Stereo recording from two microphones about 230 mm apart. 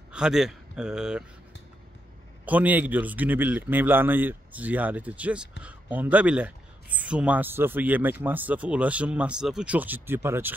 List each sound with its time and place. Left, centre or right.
0.1 s a man's voice: centre
2.4 s speech: centre